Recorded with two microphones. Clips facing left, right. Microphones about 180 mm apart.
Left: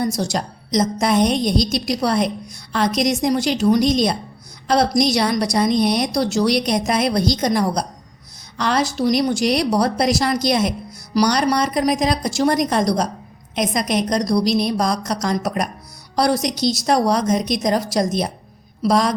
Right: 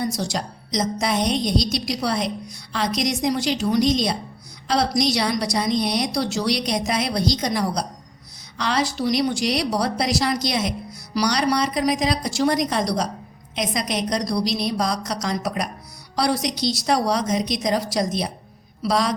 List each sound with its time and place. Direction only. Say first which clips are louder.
0.0 s a woman's voice: left 4 dB; 45° left (ahead or behind)